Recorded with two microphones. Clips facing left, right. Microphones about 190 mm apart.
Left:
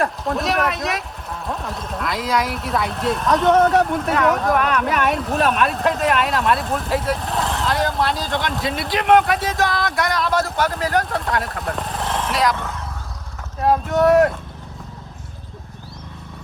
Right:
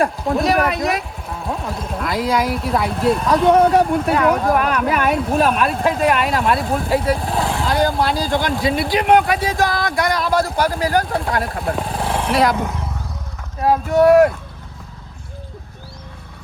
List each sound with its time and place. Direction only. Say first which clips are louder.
0.3 s speech: right 5 dB; centre (ahead or behind)
12.3 s speech: right 4 dB; 55° right (ahead or behind)
13.6 s speech: right 3 dB; centre (ahead or behind)